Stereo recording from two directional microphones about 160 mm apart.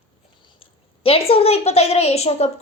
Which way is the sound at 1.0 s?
35° left (ahead or behind).